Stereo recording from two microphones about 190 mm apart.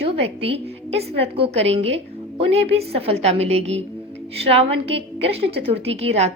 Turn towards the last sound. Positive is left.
turn(degrees=-35)  # may be behind; listen again after turning